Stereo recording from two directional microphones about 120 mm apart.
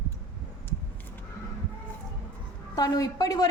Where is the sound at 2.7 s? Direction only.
30° left (ahead or behind).